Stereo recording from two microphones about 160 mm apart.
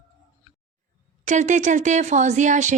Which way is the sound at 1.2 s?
50° right (ahead or behind).